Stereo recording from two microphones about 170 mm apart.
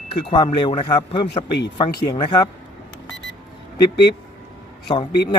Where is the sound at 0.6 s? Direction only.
25° left (ahead or behind).